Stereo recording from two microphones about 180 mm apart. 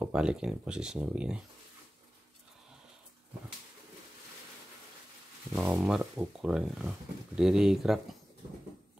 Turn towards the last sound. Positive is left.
turn(degrees=-5)  # may be behind; listen again after turning